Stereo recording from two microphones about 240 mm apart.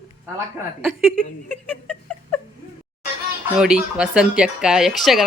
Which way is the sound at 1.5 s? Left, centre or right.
Centre.